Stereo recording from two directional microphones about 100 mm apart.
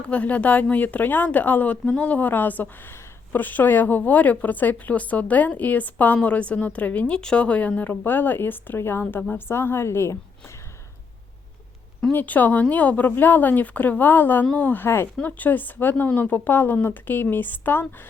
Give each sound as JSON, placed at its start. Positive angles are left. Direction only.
{"t": 0.1, "sound": "a woman's voice", "side_deg": 15}
{"t": 12.1, "sound": "a woman's voice", "side_deg": 15}